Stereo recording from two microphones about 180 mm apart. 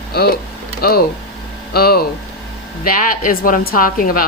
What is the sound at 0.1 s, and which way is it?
A woman's voice, 60° left (ahead or behind).